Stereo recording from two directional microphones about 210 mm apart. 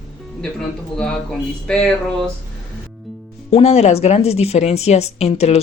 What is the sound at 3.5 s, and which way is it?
A woman's voice, 30° left (ahead or behind).